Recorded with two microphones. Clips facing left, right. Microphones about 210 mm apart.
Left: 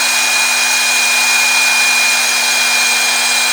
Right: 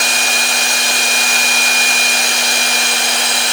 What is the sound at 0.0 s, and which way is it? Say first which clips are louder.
Hair dryer: right 2 dB; 30° right (ahead or behind).